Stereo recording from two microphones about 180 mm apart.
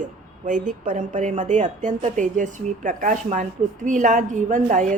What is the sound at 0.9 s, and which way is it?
A woman's voice, 45° right (ahead or behind).